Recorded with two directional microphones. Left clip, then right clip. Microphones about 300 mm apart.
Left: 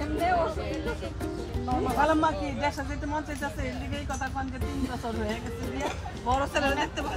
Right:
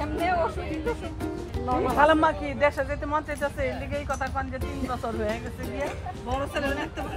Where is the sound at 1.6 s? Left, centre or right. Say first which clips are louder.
Right 5 dB; right.